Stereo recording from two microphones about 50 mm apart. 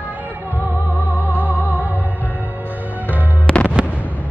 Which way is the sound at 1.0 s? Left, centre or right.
Right.